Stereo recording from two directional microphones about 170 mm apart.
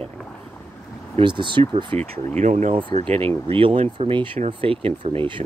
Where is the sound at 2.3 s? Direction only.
45° right (ahead or behind).